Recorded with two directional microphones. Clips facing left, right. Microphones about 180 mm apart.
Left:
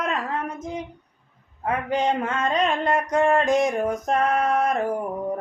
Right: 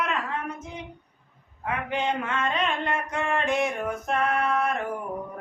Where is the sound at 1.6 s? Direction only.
40° left (ahead or behind).